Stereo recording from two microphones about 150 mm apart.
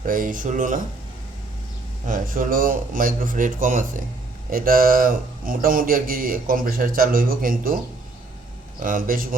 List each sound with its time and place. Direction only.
0.0 s a man's voice: 65° right (ahead or behind)
2.0 s a man's voice: 65° right (ahead or behind)
4.5 s a man's voice: 70° right (ahead or behind)
8.8 s a man's voice: 65° right (ahead or behind)